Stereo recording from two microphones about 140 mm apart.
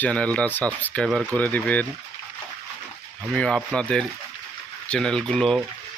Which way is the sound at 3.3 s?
5° left (ahead or behind).